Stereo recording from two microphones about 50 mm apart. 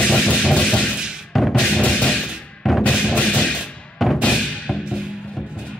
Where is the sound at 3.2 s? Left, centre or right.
Left.